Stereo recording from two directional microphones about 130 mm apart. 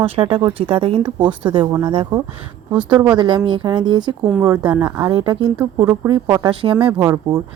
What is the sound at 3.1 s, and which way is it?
Speech, 35° right (ahead or behind).